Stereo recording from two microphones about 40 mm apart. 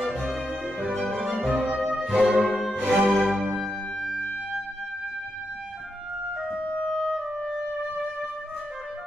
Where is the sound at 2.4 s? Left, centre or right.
Centre.